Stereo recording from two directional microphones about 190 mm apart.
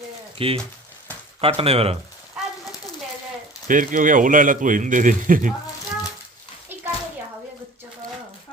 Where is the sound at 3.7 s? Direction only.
45° right (ahead or behind).